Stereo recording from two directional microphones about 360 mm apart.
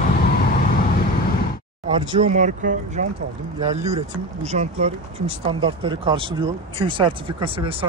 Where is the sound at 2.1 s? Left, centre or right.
Centre.